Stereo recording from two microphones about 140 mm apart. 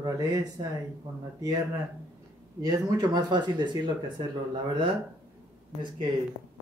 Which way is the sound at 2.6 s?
30° right (ahead or behind).